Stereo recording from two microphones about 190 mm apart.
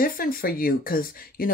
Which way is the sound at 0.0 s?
50° left (ahead or behind).